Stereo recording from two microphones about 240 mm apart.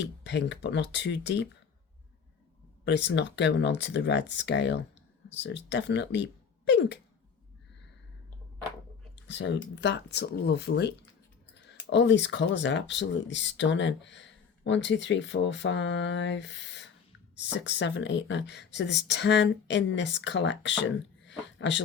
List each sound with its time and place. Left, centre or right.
0.0 s speech: left
2.8 s speech: left
9.1 s speech: left
21.2 s a sound: left